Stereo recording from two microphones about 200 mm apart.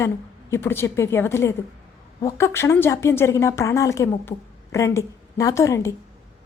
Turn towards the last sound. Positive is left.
turn(degrees=15)  # may be behind; listen again after turning